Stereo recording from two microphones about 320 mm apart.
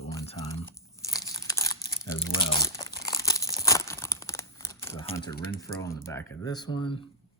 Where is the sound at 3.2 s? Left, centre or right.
Centre.